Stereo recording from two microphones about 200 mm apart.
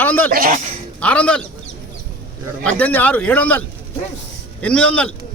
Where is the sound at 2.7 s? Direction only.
5° left (ahead or behind).